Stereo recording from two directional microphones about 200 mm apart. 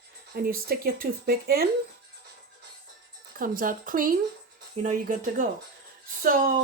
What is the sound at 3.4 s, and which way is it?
Speech, 45° right (ahead or behind).